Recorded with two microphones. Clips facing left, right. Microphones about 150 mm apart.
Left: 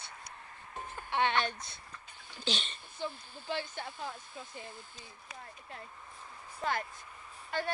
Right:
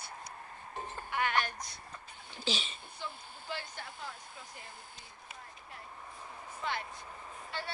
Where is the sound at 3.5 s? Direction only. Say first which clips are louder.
Left 5 dB; 20° left (ahead or behind).